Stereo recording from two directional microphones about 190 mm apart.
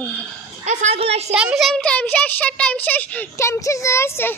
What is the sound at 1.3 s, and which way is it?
A child's voice, 5° right (ahead or behind).